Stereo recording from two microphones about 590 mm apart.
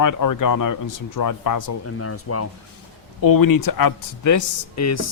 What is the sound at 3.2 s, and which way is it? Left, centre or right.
Speech, left.